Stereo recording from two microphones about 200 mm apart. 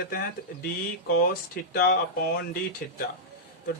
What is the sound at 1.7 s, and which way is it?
Speech, 50° left (ahead or behind).